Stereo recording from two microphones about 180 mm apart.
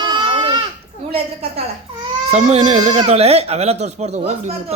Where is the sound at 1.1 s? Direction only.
30° right (ahead or behind).